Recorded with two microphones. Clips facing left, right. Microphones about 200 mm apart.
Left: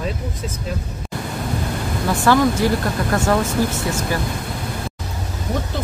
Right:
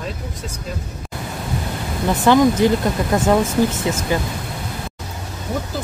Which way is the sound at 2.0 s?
20° right (ahead or behind).